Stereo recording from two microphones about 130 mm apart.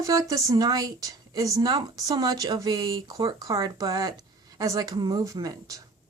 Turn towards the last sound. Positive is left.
turn(degrees=-30)  # may be behind; listen again after turning